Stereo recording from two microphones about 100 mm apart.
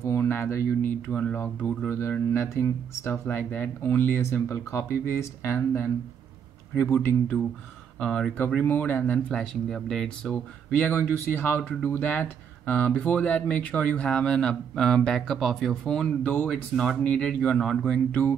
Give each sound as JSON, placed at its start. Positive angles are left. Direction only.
{"t": 0.0, "sound": "speech", "side_deg": 25}
{"t": 1.0, "sound": "speech", "side_deg": 15}
{"t": 9.3, "sound": "speech", "side_deg": 5}